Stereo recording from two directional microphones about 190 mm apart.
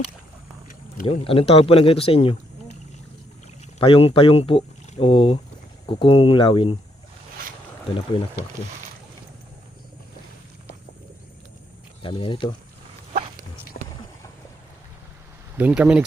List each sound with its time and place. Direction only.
1.0 s speech: 30° left (ahead or behind)
3.8 s speech: 30° left (ahead or behind)
12.0 s speech: 25° left (ahead or behind)
13.7 s boat: 50° left (ahead or behind)
15.5 s speech: 10° right (ahead or behind)